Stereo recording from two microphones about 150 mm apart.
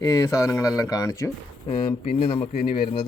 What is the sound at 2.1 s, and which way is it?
Speech, 40° left (ahead or behind).